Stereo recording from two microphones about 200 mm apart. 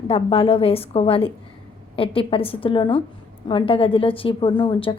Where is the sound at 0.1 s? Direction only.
30° left (ahead or behind).